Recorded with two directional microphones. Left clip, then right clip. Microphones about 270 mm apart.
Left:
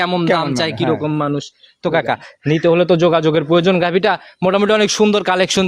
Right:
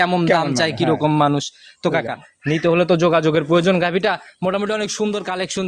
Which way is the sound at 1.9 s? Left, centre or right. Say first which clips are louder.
Left 7 dB; left.